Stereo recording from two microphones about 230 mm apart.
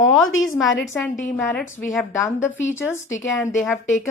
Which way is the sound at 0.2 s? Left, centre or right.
Left.